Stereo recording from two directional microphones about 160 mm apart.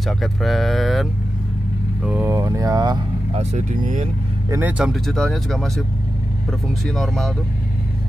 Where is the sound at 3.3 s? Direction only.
50° right (ahead or behind).